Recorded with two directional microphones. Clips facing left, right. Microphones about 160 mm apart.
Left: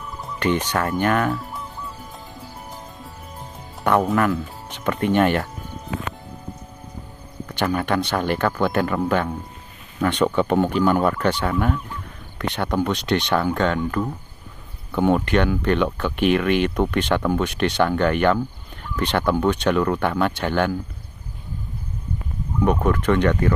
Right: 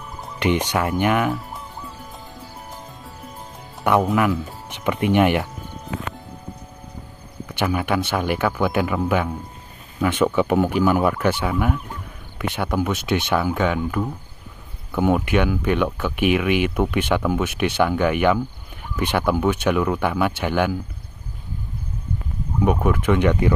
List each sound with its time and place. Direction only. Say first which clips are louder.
0.4 s speech: right 1 dB; 15° right (ahead or behind)
4.0 s speech: even; 5° right (ahead or behind)
7.4 s speech: even; 10° right (ahead or behind)
22.6 s speech: even; 10° right (ahead or behind)